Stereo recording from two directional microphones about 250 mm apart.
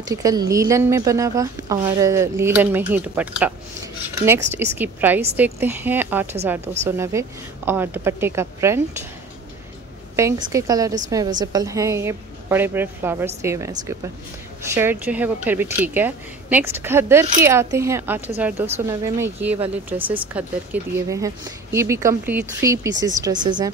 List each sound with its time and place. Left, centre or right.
0.0 s speech: centre
6.6 s a woman's voice: right
7.0 s speech: centre
10.1 s speech: centre